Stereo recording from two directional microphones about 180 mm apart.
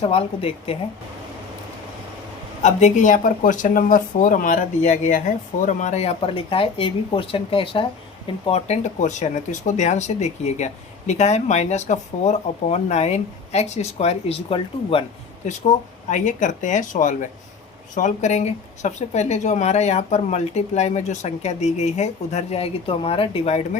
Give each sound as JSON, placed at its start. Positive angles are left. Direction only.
{"t": 0.0, "sound": "speech", "side_deg": 30}
{"t": 2.6, "sound": "speech", "side_deg": 40}
{"t": 15.4, "sound": "speech", "side_deg": 40}